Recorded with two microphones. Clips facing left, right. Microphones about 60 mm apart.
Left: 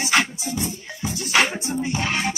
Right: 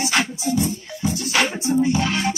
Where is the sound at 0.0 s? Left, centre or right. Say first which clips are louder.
Even; left.